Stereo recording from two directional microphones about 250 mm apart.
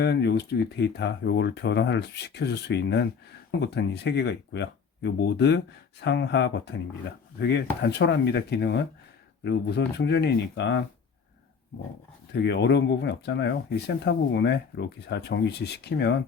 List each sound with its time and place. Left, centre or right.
0.0 s speech: left
12.3 s speech: left